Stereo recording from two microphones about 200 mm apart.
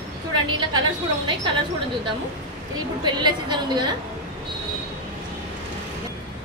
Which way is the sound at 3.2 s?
20° right (ahead or behind).